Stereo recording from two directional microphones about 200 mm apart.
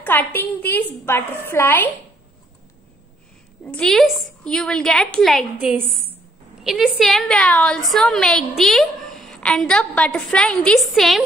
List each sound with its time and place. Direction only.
0.0 s a woman's voice: 10° left (ahead or behind)
3.6 s a woman's voice: 5° left (ahead or behind)